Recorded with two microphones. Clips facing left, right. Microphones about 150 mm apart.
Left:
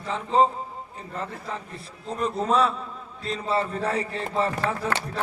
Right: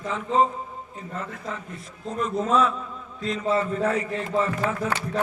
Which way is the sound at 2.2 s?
35° left (ahead or behind).